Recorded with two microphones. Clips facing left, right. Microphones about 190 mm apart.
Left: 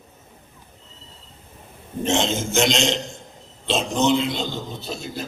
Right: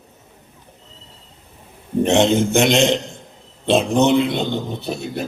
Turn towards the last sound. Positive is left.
turn(degrees=-65)  # may be behind; listen again after turning